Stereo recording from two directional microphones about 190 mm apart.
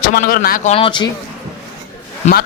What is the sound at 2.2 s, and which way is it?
Speech, 35° left (ahead or behind).